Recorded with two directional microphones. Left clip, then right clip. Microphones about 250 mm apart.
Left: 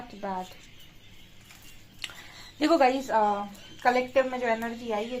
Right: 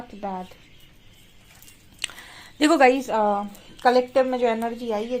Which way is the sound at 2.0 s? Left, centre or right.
Right.